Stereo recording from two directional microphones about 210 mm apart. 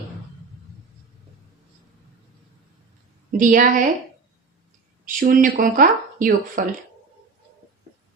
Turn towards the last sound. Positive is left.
turn(degrees=-40)  # may be behind; listen again after turning